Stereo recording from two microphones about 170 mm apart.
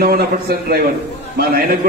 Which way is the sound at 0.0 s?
65° right (ahead or behind).